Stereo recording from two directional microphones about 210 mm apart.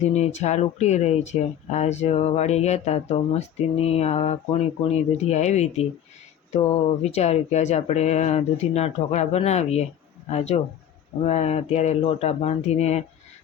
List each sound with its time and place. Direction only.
0.0 s speech: 35° left (ahead or behind)